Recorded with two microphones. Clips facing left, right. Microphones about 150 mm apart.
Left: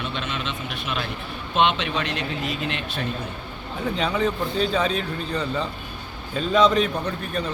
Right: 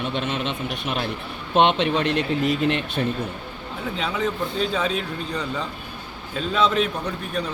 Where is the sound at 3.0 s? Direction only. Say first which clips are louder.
Right 3 dB; 35° right (ahead or behind).